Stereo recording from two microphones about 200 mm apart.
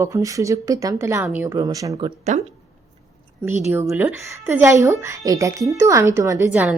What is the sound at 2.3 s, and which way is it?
Speech, 35° right (ahead or behind).